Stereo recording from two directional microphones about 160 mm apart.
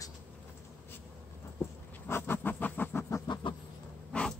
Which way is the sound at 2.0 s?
15° left (ahead or behind).